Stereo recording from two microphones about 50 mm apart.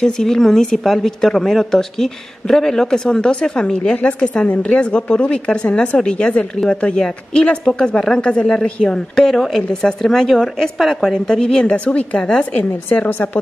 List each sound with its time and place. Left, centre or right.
0.0 s a woman's voice: centre
12.9 s a woman's voice: left